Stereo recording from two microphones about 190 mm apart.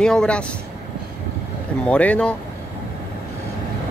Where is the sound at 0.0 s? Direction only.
5° left (ahead or behind).